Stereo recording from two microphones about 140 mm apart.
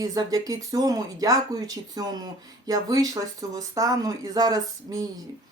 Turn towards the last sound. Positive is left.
turn(degrees=-25)  # may be behind; listen again after turning